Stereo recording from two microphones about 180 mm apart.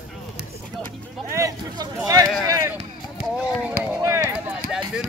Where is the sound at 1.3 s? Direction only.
15° right (ahead or behind).